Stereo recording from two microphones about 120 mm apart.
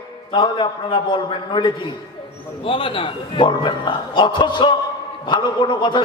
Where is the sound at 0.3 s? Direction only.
40° left (ahead or behind).